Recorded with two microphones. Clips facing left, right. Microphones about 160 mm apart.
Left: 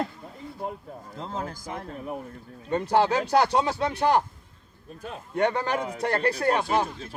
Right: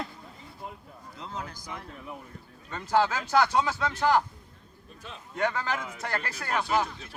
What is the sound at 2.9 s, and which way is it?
A man's voice, 25° left (ahead or behind).